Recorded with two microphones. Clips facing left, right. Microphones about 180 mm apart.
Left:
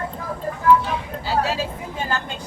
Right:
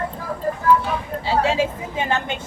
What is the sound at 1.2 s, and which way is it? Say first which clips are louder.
Vehicle: right 3 dB; 25° right (ahead or behind).